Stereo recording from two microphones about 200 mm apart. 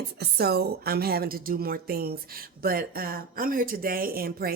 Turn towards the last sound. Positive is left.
turn(degrees=-50)  # may be behind; listen again after turning